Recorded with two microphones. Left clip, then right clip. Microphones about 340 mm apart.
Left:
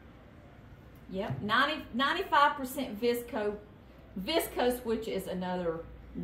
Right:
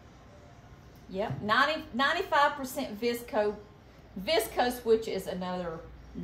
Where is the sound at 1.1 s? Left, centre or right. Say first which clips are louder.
Right 2 dB; right.